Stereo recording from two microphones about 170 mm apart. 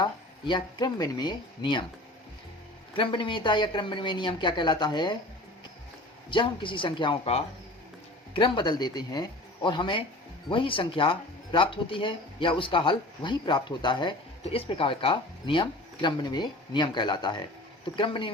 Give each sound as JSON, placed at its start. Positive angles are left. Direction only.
{"t": 0.0, "sound": "speech", "side_deg": 25}
{"t": 2.9, "sound": "speech", "side_deg": 30}
{"t": 6.3, "sound": "speech", "side_deg": 30}